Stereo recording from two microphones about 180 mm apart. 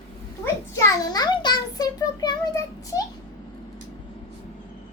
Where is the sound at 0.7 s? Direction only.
20° left (ahead or behind).